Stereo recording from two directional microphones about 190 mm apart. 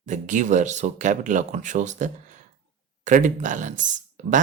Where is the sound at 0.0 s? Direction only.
40° right (ahead or behind).